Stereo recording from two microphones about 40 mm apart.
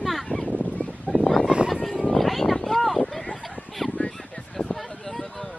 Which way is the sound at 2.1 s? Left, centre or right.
Centre.